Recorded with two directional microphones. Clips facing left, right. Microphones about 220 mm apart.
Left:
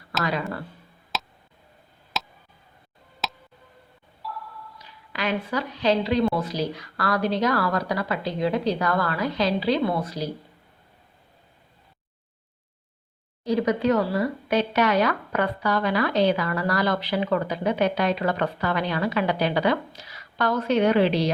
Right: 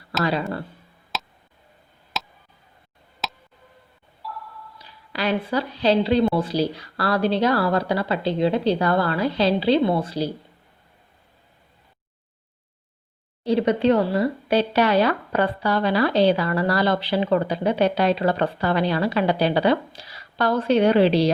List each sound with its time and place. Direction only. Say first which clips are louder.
1.1 s tick: even; centre (ahead or behind)
2.1 s a sound: even; centre (ahead or behind)
4.8 s a woman's voice: right 3 dB; 35° right (ahead or behind)
13.4 s speech: right 3 dB; 30° right (ahead or behind)